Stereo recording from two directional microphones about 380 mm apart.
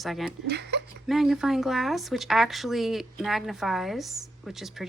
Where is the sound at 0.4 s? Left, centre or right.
Right.